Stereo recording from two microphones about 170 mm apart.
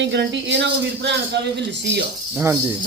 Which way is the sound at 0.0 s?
90° right.